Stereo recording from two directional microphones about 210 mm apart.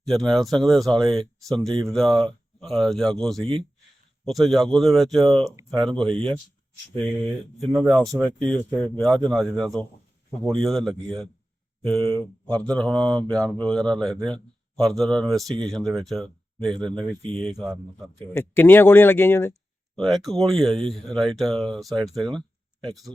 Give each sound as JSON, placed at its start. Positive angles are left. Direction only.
{"t": 0.0, "sound": "speech", "side_deg": 0}
{"t": 5.5, "sound": "speech", "side_deg": -20}
{"t": 7.6, "sound": "speech", "side_deg": 0}
{"t": 18.3, "sound": "speech", "side_deg": 10}